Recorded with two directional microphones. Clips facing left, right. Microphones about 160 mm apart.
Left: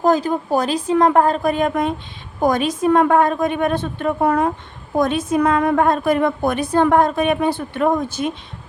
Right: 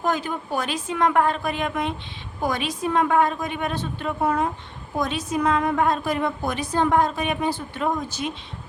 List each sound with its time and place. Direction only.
0.0 s a woman's voice: 35° left (ahead or behind)